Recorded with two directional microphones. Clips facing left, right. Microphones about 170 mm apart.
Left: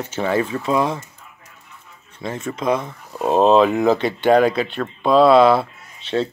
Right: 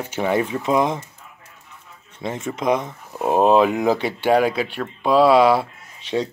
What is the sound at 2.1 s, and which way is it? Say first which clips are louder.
Speech: even; 20° right (ahead or behind).